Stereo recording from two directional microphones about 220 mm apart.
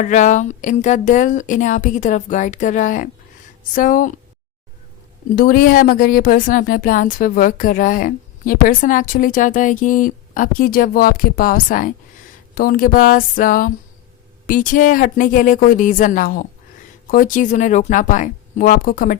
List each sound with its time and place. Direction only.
0.0 s speech: 35° left (ahead or behind)
5.4 s speech: 40° left (ahead or behind)